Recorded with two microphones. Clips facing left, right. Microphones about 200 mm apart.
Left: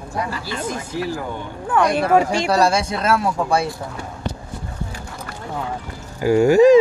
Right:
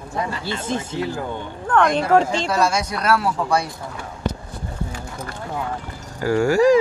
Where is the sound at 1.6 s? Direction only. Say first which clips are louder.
Even; 10° left (ahead or behind).